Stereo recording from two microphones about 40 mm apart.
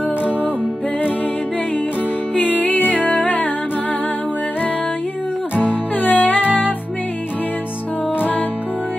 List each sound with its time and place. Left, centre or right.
2.6 s music: left
5.7 s music: left
8.2 s music: left